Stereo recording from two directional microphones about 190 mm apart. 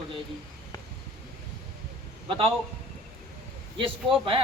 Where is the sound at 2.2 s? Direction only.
30° right (ahead or behind).